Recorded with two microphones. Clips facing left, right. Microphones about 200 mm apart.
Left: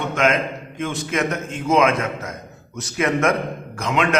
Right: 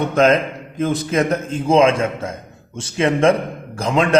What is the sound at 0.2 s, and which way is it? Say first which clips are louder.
A man's voice: right 5 dB; 35° right (ahead or behind).